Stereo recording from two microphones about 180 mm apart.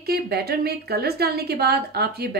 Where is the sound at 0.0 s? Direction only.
60° right (ahead or behind).